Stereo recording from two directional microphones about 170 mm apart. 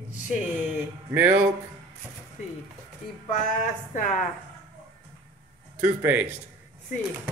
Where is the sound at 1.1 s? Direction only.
10° right (ahead or behind).